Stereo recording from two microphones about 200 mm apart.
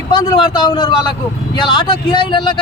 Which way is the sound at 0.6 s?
25° left (ahead or behind).